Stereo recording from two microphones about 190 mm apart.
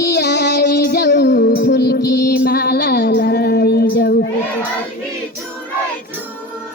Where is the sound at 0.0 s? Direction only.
60° left (ahead or behind).